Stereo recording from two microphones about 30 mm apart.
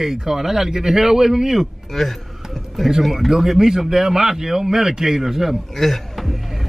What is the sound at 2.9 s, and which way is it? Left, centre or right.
A man's voice, centre.